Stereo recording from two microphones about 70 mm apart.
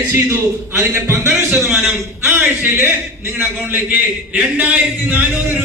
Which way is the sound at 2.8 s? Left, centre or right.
Right.